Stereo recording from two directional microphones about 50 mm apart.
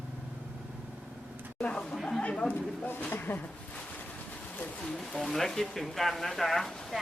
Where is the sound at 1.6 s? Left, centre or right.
Left.